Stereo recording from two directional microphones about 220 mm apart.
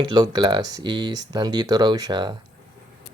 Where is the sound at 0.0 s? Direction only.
20° right (ahead or behind).